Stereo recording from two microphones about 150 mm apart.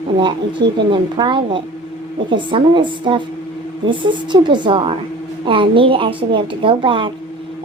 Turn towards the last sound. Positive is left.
turn(degrees=-35)  # may be behind; listen again after turning